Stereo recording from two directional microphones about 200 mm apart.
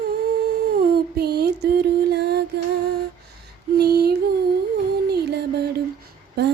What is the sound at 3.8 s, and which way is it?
Female singing, 50° right (ahead or behind).